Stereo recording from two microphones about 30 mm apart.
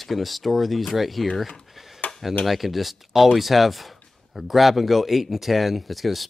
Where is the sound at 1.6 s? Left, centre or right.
Centre.